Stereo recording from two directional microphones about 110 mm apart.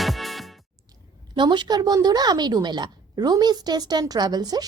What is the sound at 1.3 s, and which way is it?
A woman's voice, 40° right (ahead or behind).